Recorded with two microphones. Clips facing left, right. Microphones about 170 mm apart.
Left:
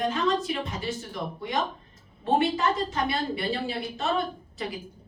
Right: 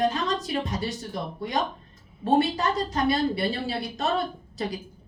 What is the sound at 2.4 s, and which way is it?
A woman's voice, 40° right (ahead or behind).